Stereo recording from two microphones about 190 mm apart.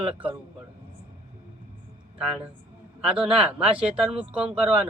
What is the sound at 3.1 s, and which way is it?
Speech, 30° right (ahead or behind).